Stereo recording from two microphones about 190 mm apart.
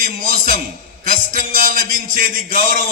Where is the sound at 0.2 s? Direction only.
45° right (ahead or behind).